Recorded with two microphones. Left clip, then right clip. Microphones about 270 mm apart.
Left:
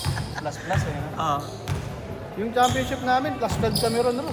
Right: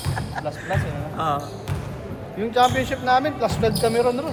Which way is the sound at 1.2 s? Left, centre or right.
Centre.